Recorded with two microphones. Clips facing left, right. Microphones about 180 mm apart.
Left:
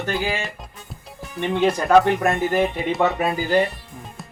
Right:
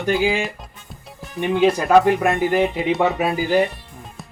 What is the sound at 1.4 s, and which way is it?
Speech, 10° right (ahead or behind).